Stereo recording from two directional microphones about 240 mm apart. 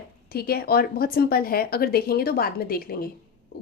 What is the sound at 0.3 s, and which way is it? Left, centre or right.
Speech, left.